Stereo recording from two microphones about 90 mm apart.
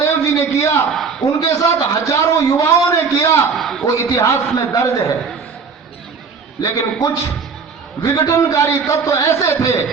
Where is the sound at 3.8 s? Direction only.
40° left (ahead or behind).